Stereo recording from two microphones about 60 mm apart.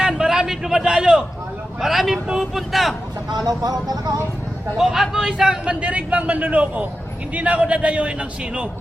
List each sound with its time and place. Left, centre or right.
0.0 s a sound: centre
0.8 s a man's voice: centre
3.4 s speech: right
4.8 s a man's voice: centre